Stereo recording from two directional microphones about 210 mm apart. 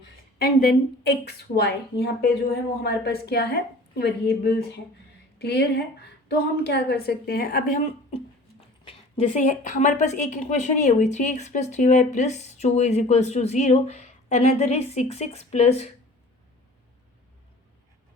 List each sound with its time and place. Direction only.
0.0 s a woman's voice: 50° left (ahead or behind)
8.8 s a woman's voice: 25° left (ahead or behind)